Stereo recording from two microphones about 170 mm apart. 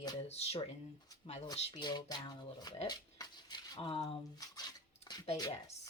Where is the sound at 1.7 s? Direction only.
25° left (ahead or behind).